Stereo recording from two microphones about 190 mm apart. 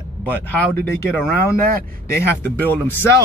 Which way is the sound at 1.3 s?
50° right (ahead or behind).